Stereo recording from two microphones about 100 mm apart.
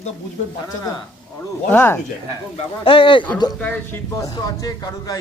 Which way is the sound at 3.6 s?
20° left (ahead or behind).